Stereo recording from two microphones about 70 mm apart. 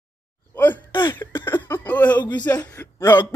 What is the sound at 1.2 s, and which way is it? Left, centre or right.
Cough, left.